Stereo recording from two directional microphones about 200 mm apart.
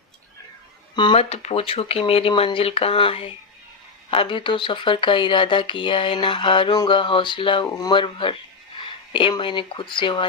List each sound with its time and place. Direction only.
0.9 s speech: 25° left (ahead or behind)